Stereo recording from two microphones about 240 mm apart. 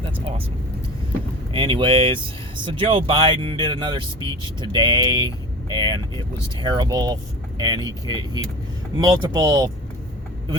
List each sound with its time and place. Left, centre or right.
0.0 s speech: right
1.5 s speech: right